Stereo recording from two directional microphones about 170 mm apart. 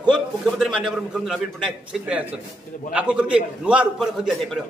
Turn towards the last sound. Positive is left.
turn(degrees=0)  # may be behind; listen again after turning